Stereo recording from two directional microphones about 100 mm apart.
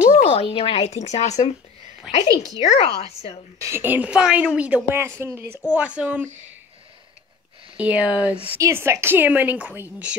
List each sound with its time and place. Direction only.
0.1 s speech: 80° left
2.1 s a woman's voice: 5° right (ahead or behind)
2.7 s speech: 85° left
3.5 s a woman's voice: 30° right (ahead or behind)
3.8 s a woman's voice: 15° right (ahead or behind)
5.6 s a woman's voice: 10° right (ahead or behind)
7.7 s a woman's voice: 15° right (ahead or behind)
8.5 s a woman's voice: 25° right (ahead or behind)